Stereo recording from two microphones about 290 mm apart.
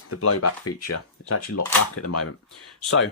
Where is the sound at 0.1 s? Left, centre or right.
Left.